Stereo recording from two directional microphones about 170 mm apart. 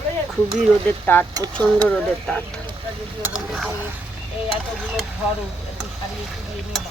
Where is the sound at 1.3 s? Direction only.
20° right (ahead or behind).